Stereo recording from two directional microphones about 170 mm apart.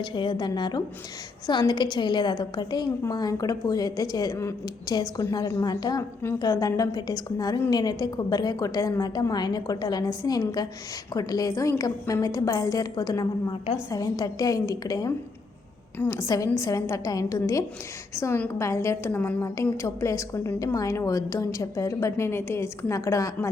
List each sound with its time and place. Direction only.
0.0 s a woman's voice: 30° left (ahead or behind)